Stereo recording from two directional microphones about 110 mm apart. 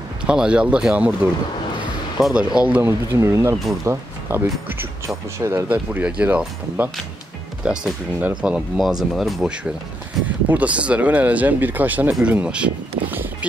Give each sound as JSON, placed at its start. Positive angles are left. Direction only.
{"t": 0.2, "sound": "speech", "side_deg": -10}
{"t": 2.1, "sound": "speech", "side_deg": -5}
{"t": 3.1, "sound": "speech", "side_deg": -25}
{"t": 5.7, "sound": "speech", "side_deg": -15}
{"t": 10.2, "sound": "speech", "side_deg": -15}